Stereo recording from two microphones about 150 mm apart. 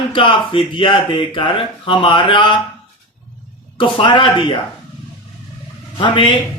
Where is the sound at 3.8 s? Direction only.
35° left (ahead or behind).